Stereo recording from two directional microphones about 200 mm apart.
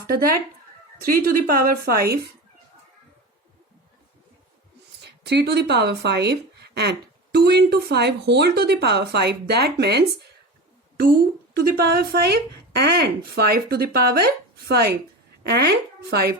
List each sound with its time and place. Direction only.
0.1 s speech: 45° right (ahead or behind)
5.2 s speech: 55° right (ahead or behind)